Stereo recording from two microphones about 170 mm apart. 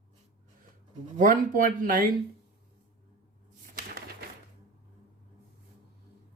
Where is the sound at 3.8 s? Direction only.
60° right (ahead or behind).